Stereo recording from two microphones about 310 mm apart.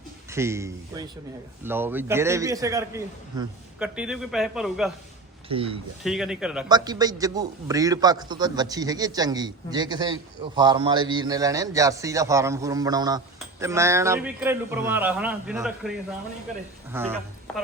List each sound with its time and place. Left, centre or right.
0.3 s a man's voice: centre
5.5 s a man's voice: centre
6.0 s speech: centre
6.7 s a man's voice: centre
16.9 s a man's voice: centre